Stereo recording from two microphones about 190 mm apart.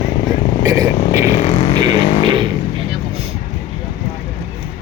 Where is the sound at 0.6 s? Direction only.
15° right (ahead or behind).